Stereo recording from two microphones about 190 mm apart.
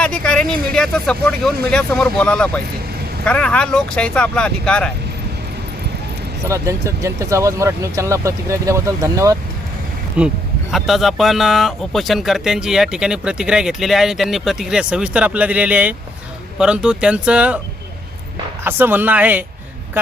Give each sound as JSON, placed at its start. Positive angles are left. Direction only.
{"t": 0.0, "sound": "speech", "side_deg": 5}
{"t": 6.5, "sound": "speech", "side_deg": -15}
{"t": 10.2, "sound": "speech", "side_deg": -5}
{"t": 18.6, "sound": "speech", "side_deg": -10}